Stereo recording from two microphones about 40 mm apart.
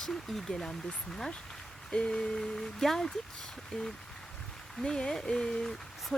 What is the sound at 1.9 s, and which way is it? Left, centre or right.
Speech, left.